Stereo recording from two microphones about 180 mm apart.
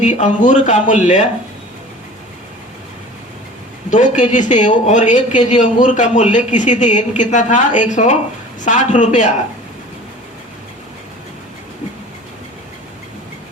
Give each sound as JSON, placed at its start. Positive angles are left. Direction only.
{"t": 0.0, "sound": "speech", "side_deg": 40}
{"t": 3.8, "sound": "speech", "side_deg": 45}